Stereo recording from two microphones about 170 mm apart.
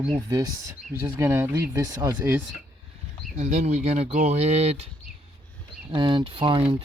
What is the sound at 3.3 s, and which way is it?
Speech, 40° right (ahead or behind).